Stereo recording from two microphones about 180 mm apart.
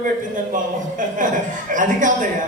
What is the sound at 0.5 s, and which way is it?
A man's voice, 45° right (ahead or behind).